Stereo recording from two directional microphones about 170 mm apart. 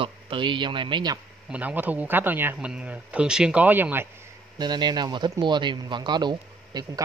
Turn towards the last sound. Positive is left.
turn(degrees=-25)  # may be behind; listen again after turning